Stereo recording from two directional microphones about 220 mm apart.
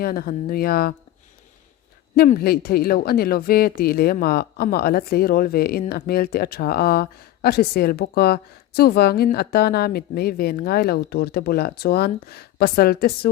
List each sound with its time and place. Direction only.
0.0 s speech: 40° left (ahead or behind)
2.1 s speech: 45° left (ahead or behind)